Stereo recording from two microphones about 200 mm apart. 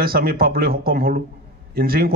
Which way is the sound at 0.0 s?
50° right (ahead or behind).